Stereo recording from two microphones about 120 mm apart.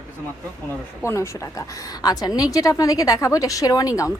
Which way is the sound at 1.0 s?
25° left (ahead or behind).